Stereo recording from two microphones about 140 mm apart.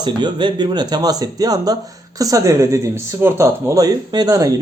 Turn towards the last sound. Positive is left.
turn(degrees=-25)  # may be behind; listen again after turning